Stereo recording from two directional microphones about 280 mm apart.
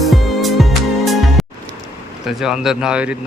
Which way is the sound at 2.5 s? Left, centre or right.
Centre.